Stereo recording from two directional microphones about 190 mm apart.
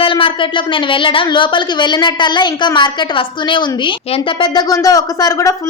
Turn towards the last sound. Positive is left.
turn(degrees=20)  # may be behind; listen again after turning